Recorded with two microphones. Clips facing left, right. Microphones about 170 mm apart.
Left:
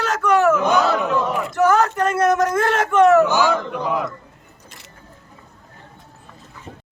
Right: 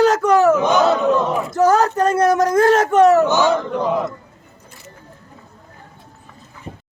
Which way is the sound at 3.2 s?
20° right (ahead or behind).